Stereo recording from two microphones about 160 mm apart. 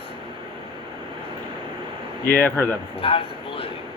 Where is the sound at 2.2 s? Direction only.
15° left (ahead or behind).